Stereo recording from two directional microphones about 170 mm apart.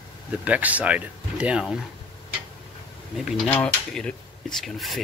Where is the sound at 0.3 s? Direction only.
10° right (ahead or behind).